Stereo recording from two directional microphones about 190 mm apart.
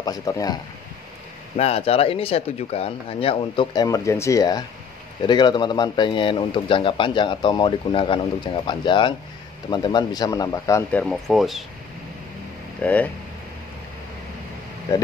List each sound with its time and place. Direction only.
0.0 s speech: 20° left (ahead or behind)
1.6 s speech: 30° left (ahead or behind)
10.9 s speech: 5° left (ahead or behind)
12.8 s speech: 10° left (ahead or behind)